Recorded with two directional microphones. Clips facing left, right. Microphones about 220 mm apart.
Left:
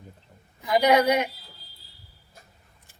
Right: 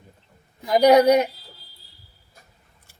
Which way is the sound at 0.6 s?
40° right (ahead or behind).